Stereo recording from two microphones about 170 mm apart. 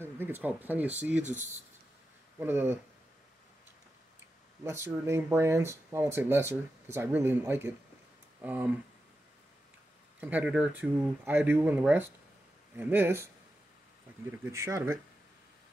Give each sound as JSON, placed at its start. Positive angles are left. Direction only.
{"t": 0.0, "sound": "speech", "side_deg": -10}
{"t": 2.3, "sound": "speech", "side_deg": -15}
{"t": 4.6, "sound": "speech", "side_deg": -15}
{"t": 10.2, "sound": "speech", "side_deg": -10}
{"t": 14.3, "sound": "speech", "side_deg": -15}